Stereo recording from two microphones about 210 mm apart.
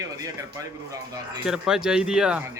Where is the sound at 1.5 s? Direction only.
5° right (ahead or behind).